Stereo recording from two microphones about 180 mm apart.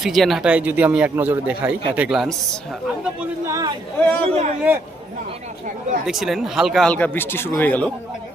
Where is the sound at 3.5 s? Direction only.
20° right (ahead or behind).